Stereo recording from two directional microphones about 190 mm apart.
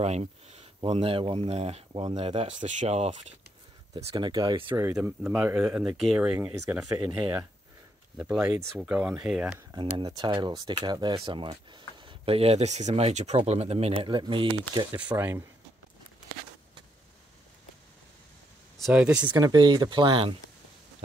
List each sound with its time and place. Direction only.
0.0 s speech: 35° right (ahead or behind)
5.0 s speech: 10° right (ahead or behind)
9.9 s speech: 20° right (ahead or behind)
15.0 s speech: 10° right (ahead or behind)
18.8 s speech: 5° right (ahead or behind)
19.3 s speech: 20° right (ahead or behind)